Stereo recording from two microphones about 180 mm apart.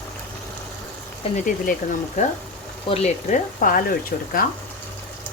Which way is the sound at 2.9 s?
40° left (ahead or behind).